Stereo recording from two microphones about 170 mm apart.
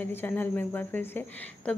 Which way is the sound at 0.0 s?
10° left (ahead or behind).